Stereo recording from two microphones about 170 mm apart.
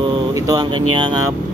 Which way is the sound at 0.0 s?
25° right (ahead or behind).